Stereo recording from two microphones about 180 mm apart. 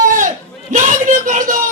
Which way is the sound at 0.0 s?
45° right (ahead or behind).